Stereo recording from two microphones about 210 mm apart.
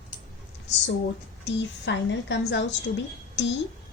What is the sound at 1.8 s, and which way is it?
Speech, 60° left (ahead or behind).